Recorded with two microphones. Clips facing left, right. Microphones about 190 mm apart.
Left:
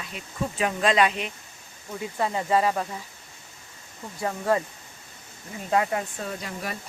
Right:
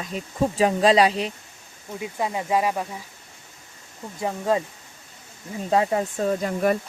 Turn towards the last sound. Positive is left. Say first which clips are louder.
# right 12 dB
turn(degrees=-45)  # may be behind; listen again after turning